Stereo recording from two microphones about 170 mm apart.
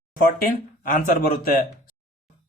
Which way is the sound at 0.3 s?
55° left (ahead or behind).